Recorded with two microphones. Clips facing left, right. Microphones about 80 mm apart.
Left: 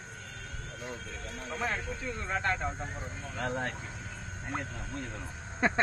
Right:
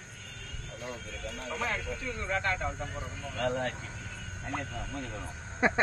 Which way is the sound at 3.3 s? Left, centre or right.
Centre.